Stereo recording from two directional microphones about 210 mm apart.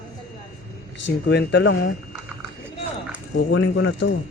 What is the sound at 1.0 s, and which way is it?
Speech, 55° left (ahead or behind).